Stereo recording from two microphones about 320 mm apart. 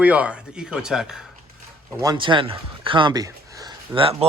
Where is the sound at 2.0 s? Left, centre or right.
Centre.